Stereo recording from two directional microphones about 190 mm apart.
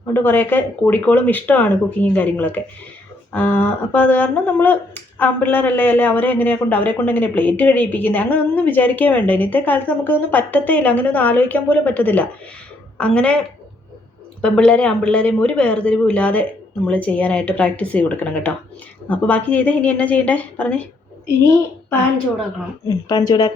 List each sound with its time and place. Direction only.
0.1 s a woman's voice: 10° left (ahead or behind)
14.4 s speech: 5° left (ahead or behind)
22.9 s speech: 20° left (ahead or behind)